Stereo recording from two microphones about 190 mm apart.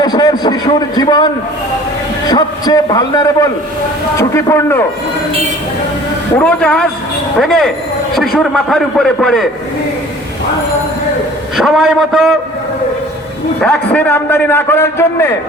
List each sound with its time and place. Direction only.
0.0 s a man's voice: 20° left (ahead or behind)
2.3 s a man's voice: 20° left (ahead or behind)
6.4 s a man's voice: 5° left (ahead or behind)
11.5 s a man's voice: centre (ahead or behind)
13.6 s a man's voice: 5° left (ahead or behind)